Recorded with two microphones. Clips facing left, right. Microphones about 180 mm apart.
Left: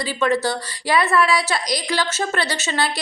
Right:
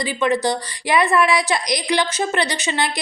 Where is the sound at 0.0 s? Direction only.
15° right (ahead or behind).